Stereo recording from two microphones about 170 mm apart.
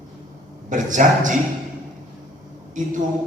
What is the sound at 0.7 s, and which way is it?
Speech, 50° right (ahead or behind).